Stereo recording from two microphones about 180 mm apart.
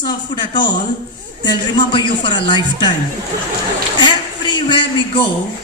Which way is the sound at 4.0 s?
25° left (ahead or behind).